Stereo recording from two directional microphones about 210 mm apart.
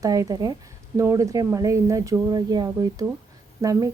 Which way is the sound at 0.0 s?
15° right (ahead or behind).